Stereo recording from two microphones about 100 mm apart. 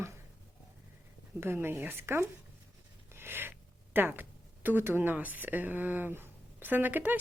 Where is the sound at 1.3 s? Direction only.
25° right (ahead or behind).